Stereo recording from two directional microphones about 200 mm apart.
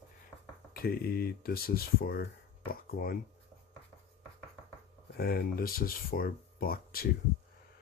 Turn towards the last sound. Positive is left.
turn(degrees=45)  # may be behind; listen again after turning